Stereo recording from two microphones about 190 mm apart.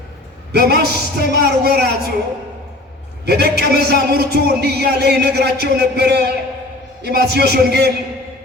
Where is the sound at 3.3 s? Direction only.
55° right (ahead or behind).